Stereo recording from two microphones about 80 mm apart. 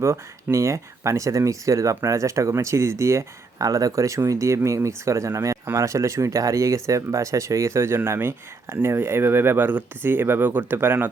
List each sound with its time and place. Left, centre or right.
0.0 s speech: right